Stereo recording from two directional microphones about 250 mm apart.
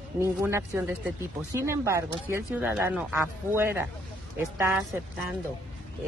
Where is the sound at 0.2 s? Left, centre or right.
Centre.